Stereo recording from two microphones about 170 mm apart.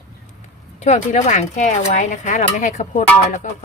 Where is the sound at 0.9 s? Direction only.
45° left (ahead or behind).